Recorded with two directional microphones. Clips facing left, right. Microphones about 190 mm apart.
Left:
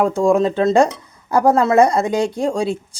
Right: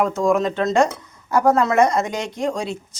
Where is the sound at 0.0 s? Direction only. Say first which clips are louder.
Left 4 dB; 30° left (ahead or behind).